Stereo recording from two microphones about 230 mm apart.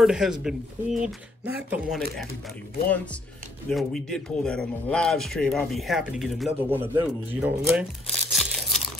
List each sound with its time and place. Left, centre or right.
0.0 s a man's voice: centre
3.7 s a man's voice: centre
8.1 s a sound: centre